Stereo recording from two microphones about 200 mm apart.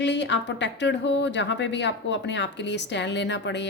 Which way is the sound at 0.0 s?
60° left (ahead or behind).